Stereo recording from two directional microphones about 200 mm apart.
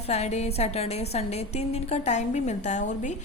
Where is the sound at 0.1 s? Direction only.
35° left (ahead or behind).